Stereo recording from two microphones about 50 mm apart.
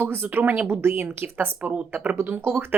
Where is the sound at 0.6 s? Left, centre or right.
Right.